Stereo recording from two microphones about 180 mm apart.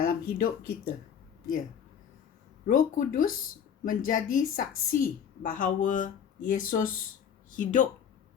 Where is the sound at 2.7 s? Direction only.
50° left (ahead or behind).